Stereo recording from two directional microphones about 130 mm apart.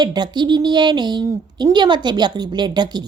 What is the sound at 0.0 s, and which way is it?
Speech, 35° right (ahead or behind).